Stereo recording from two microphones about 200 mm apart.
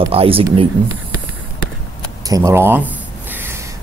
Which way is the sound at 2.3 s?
15° right (ahead or behind).